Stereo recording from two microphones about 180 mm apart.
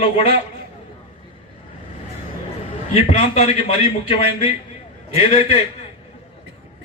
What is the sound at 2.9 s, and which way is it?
A man's voice, 35° left (ahead or behind).